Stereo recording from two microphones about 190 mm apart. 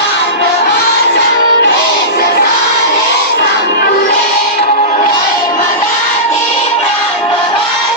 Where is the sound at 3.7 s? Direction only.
55° left (ahead or behind).